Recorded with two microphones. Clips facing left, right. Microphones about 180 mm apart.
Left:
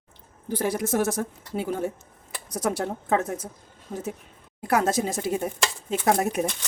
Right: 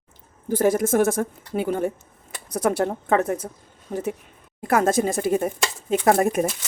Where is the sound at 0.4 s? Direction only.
45° right (ahead or behind).